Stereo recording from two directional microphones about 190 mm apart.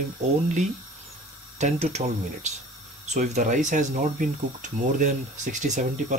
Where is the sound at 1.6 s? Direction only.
35° right (ahead or behind).